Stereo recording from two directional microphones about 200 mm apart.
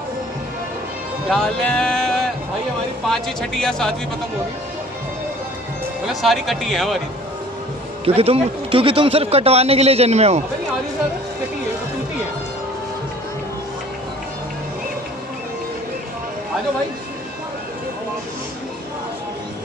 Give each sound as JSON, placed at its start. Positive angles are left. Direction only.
{"t": 1.3, "sound": "speech", "side_deg": 0}
{"t": 6.2, "sound": "speech", "side_deg": 0}
{"t": 8.0, "sound": "a man's voice", "side_deg": -30}